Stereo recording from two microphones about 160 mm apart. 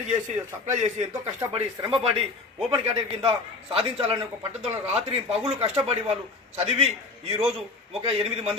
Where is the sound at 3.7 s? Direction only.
35° right (ahead or behind).